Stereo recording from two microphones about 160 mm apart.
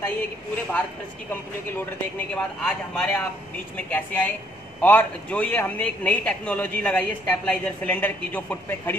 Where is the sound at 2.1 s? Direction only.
5° left (ahead or behind).